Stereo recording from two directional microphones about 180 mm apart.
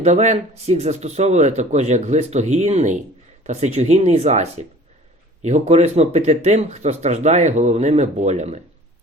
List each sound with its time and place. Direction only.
0.0 s speech: 40° right (ahead or behind)